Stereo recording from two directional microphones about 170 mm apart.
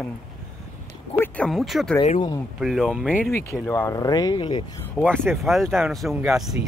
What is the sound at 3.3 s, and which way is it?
Speech, 15° left (ahead or behind).